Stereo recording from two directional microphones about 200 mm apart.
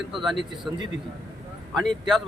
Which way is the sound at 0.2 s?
Centre (ahead or behind).